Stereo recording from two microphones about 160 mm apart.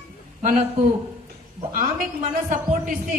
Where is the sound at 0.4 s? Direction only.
50° right (ahead or behind).